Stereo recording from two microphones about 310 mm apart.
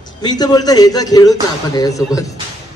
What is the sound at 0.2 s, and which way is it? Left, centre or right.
A man's voice, centre.